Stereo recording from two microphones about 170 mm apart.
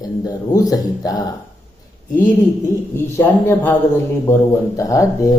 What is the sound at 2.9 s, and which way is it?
Speech, 15° left (ahead or behind).